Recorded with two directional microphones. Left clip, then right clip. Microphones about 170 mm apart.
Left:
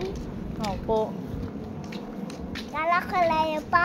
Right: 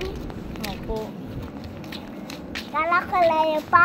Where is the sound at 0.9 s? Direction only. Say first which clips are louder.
Left 7 dB; 60° left (ahead or behind).